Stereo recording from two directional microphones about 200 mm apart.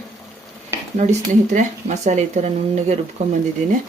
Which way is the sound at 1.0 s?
35° right (ahead or behind).